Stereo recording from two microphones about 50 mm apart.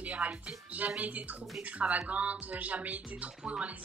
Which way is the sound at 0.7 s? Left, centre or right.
Right.